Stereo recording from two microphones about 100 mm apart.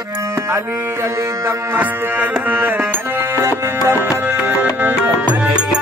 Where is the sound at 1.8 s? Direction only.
15° right (ahead or behind).